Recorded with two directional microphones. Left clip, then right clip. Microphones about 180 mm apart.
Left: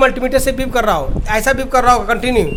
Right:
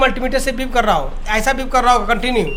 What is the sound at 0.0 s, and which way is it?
A woman's voice, 65° left (ahead or behind).